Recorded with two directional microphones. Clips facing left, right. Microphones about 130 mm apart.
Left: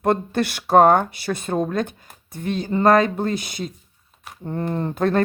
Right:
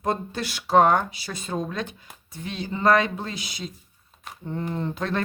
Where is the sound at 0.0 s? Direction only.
60° left (ahead or behind).